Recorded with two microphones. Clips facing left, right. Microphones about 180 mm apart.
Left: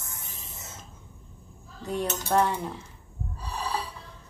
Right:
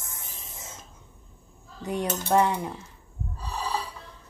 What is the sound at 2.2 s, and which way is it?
Speech, 15° right (ahead or behind).